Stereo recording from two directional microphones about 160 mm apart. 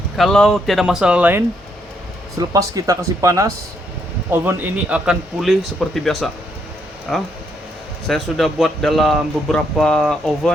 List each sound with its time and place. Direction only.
0.2 s speech: 5° left (ahead or behind)